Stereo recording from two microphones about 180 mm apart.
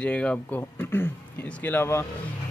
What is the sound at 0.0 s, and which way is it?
Speech, 5° left (ahead or behind).